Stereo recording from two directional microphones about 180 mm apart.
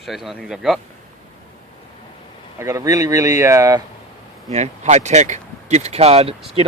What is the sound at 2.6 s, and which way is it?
Speech, 15° right (ahead or behind).